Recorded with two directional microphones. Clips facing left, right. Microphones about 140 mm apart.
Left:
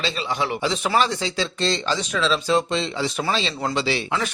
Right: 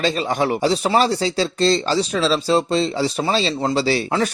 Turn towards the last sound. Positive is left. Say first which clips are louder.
# right 5 dB
turn(degrees=-40)  # may be behind; listen again after turning